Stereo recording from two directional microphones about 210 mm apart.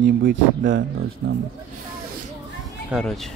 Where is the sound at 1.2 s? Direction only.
60° right (ahead or behind).